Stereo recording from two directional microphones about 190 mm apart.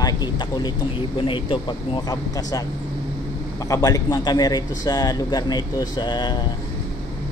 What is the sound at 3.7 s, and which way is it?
A man's voice, 20° left (ahead or behind).